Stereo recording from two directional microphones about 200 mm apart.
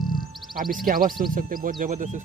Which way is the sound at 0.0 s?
Centre (ahead or behind).